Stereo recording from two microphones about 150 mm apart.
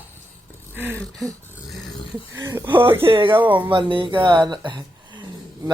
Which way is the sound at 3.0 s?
35° right (ahead or behind).